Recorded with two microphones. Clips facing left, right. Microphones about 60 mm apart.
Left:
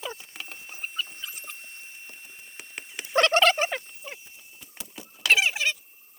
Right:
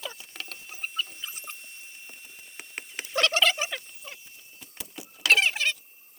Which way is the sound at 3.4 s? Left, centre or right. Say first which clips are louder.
Left 4 dB; left.